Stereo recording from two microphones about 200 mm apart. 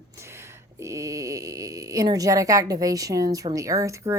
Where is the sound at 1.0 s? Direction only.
15° right (ahead or behind).